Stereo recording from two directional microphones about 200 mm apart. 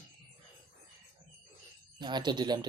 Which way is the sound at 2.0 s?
20° right (ahead or behind).